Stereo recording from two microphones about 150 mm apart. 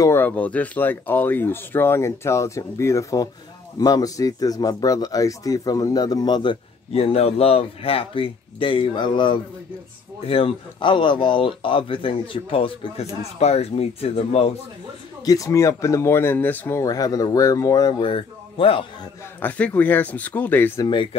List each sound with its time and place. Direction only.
0.0 s a man's voice: 15° left (ahead or behind); by 14.5 s 45° left (ahead or behind)
15.2 s speech: 20° left (ahead or behind)
18.0 s speech: 35° left (ahead or behind)
19.4 s speech: 10° left (ahead or behind)
20.8 s a man's voice: 35° left (ahead or behind)